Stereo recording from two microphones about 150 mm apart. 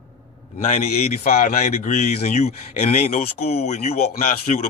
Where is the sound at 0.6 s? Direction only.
45° left (ahead or behind).